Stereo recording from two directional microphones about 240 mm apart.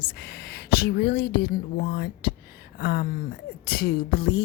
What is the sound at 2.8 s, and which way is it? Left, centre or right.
A woman's voice, left.